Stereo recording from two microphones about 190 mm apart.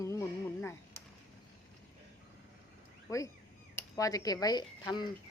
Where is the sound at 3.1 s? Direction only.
15° left (ahead or behind).